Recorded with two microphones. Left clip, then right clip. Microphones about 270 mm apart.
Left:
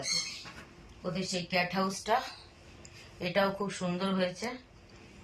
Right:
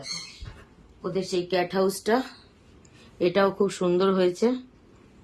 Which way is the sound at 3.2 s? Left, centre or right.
Right.